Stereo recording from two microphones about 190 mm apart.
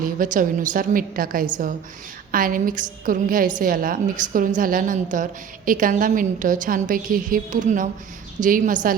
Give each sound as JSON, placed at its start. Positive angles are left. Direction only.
{"t": 0.0, "sound": "a woman's voice", "side_deg": -45}